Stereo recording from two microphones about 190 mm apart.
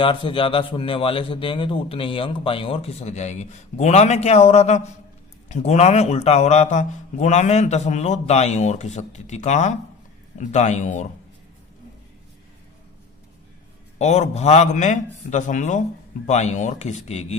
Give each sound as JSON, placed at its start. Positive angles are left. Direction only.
{"t": 0.0, "sound": "a man's voice", "side_deg": 25}
{"t": 14.0, "sound": "a man's voice", "side_deg": 35}